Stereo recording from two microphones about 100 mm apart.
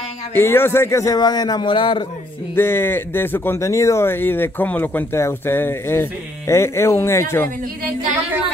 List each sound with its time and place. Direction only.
0.3 s speech: 25° left (ahead or behind)
1.1 s a man's voice: 40° left (ahead or behind)
1.7 s speech: 55° left (ahead or behind)
2.5 s speech: 25° left (ahead or behind)